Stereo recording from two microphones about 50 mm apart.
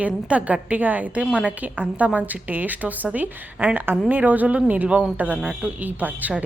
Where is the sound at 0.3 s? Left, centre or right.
Right.